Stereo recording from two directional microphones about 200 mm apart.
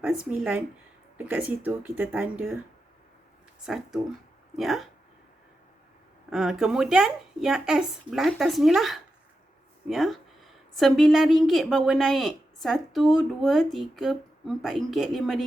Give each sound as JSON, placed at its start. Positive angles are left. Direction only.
{"t": 0.0, "sound": "speech", "side_deg": -5}
{"t": 3.7, "sound": "speech", "side_deg": 0}
{"t": 6.3, "sound": "speech", "side_deg": 0}